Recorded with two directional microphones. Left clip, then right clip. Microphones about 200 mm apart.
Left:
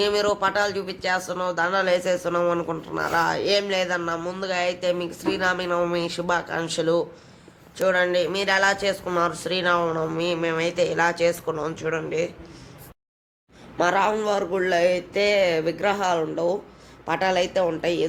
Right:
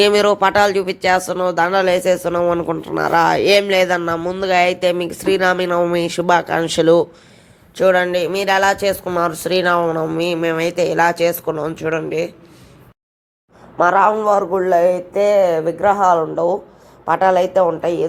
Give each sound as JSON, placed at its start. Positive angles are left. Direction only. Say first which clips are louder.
{"t": 0.0, "sound": "speech", "louder": "right 9 dB", "side_deg": -35}
{"t": 13.7, "sound": "speech", "louder": "right 8 dB", "side_deg": -10}